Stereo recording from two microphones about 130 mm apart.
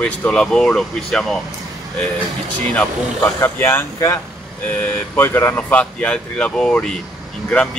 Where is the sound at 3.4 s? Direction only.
20° left (ahead or behind).